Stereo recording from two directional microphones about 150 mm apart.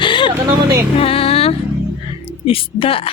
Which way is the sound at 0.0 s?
30° left (ahead or behind).